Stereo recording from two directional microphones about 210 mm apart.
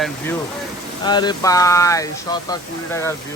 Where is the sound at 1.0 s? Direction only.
20° left (ahead or behind).